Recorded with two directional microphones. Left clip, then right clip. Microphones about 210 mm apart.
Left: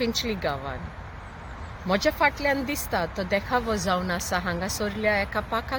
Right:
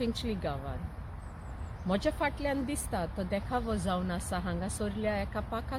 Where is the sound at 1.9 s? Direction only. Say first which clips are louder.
Left 9 dB; centre (ahead or behind).